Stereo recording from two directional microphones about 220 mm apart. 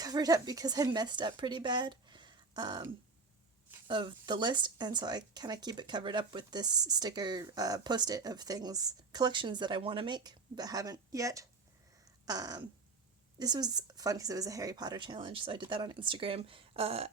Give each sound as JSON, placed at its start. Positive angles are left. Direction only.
{"t": 0.0, "sound": "speech", "side_deg": -15}
{"t": 12.2, "sound": "a sound", "side_deg": -15}
{"t": 13.4, "sound": "speech", "side_deg": -20}